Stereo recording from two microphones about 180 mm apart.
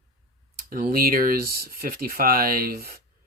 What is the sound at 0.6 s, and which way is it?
Speech, 55° right (ahead or behind).